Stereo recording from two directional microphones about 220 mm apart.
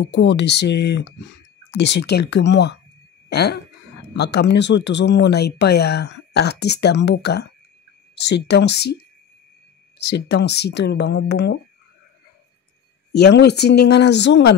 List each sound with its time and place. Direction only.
0.0 s speech: 50° left (ahead or behind)
9.9 s speech: 50° left (ahead or behind)
13.1 s speech: 50° left (ahead or behind)